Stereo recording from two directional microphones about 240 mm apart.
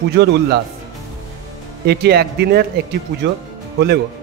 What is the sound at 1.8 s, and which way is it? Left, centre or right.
Speech, right.